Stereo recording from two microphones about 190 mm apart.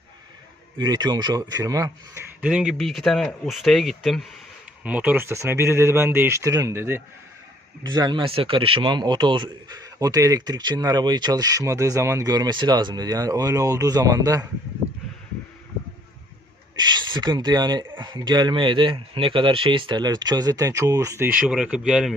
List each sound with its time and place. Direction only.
0.8 s speech: 20° right (ahead or behind)
2.4 s speech: 5° right (ahead or behind)
16.7 s speech: 20° right (ahead or behind)
21.3 s speech: 5° right (ahead or behind)